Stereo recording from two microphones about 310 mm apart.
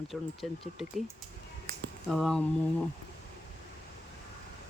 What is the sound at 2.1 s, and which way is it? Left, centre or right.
Speech, centre.